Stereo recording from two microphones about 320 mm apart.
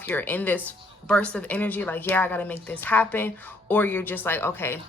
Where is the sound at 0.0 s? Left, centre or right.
Centre.